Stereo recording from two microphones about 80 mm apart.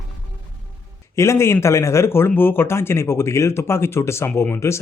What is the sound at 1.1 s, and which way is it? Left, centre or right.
Speech, left.